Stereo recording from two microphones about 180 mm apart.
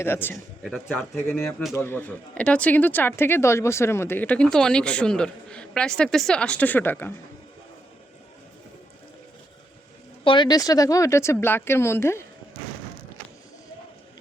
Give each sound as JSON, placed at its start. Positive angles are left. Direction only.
{"t": 0.0, "sound": "speech", "side_deg": 10}
{"t": 0.6, "sound": "speech", "side_deg": 0}
{"t": 10.2, "sound": "speech", "side_deg": 25}